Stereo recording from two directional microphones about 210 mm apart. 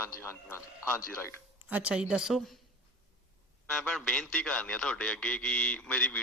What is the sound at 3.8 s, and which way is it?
A man's voice, 5° left (ahead or behind).